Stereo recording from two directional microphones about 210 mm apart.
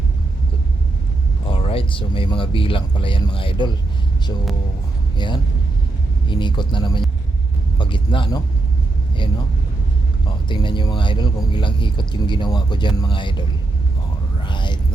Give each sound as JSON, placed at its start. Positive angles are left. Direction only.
{"t": 1.5, "sound": "speech", "side_deg": 25}
{"t": 5.1, "sound": "speech", "side_deg": 20}
{"t": 10.2, "sound": "speech", "side_deg": 20}
{"t": 14.4, "sound": "a sound", "side_deg": 20}